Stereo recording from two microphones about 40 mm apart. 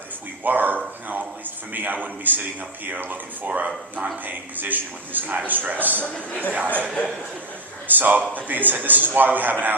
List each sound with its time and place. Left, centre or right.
0.4 s a man's voice: right
6.0 s a woman's voice: left
6.5 s a man's voice: right
7.9 s a man's voice: right